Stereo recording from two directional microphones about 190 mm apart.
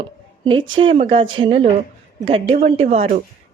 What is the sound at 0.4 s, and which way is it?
A woman's voice, 25° right (ahead or behind).